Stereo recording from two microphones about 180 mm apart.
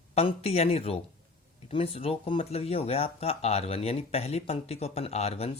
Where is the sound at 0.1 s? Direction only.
35° left (ahead or behind).